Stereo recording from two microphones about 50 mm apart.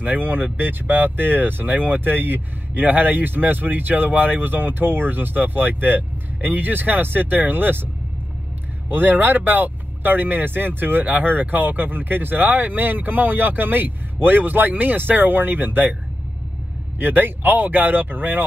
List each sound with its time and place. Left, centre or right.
0.0 s speech: right
8.9 s speech: right
17.0 s speech: right